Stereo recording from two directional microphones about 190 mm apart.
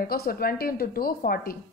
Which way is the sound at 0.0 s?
50° left (ahead or behind).